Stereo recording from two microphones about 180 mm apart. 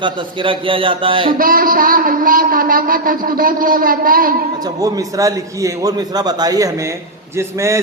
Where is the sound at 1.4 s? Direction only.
50° right (ahead or behind).